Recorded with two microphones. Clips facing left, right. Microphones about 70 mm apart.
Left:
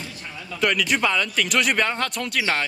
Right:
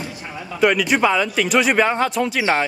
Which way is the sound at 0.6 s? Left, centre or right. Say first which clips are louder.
Right 5 dB; centre.